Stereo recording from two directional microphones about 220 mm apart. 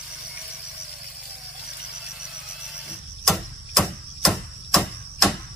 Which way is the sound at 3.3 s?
Centre (ahead or behind).